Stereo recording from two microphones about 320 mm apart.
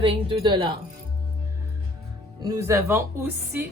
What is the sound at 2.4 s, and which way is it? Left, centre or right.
Speech, centre.